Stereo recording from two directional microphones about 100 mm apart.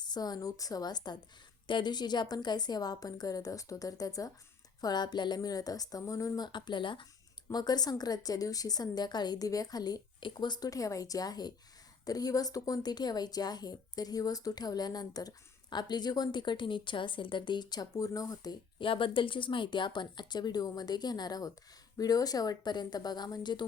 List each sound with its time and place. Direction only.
0.0 s a woman's voice: 45° left (ahead or behind)
7.5 s a woman's voice: 40° left (ahead or behind)
18.8 s a woman's voice: 60° left (ahead or behind)